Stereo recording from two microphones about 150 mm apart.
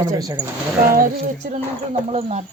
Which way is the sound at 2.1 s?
45° right (ahead or behind).